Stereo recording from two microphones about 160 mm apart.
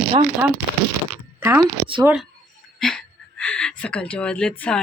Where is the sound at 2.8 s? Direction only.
5° left (ahead or behind).